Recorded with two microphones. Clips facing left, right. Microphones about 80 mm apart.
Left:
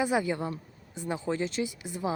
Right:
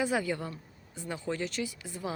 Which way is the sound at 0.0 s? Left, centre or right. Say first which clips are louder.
Left 3 dB; centre.